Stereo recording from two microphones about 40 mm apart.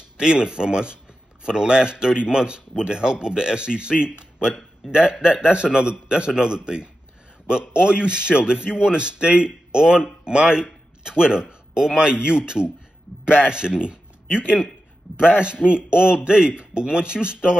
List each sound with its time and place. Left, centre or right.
0.2 s speech: right
4.8 s a man's voice: centre
5.2 s a man's voice: right